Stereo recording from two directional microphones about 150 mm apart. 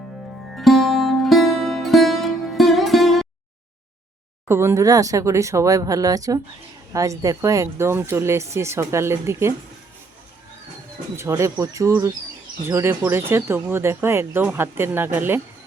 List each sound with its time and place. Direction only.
0.5 s music: centre (ahead or behind)
4.4 s speech: 15° right (ahead or behind)
11.2 s speech: 20° right (ahead or behind)